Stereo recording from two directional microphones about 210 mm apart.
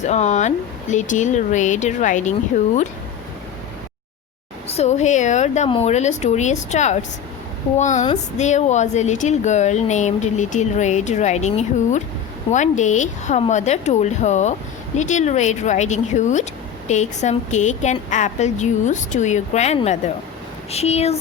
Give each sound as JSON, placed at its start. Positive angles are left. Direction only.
{"t": 0.0, "sound": "speech", "side_deg": 35}
{"t": 4.7, "sound": "speech", "side_deg": 30}